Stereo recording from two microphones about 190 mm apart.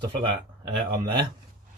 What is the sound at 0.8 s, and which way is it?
Speech, 25° right (ahead or behind).